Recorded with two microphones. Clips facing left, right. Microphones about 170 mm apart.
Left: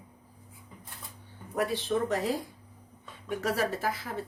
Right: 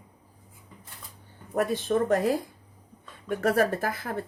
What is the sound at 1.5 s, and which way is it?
Speech, 50° right (ahead or behind).